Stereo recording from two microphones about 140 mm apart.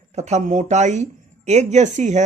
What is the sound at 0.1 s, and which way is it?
Speech, 55° right (ahead or behind).